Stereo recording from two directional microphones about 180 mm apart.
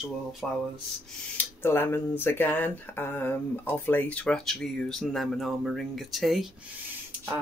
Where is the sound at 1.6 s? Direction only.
10° left (ahead or behind).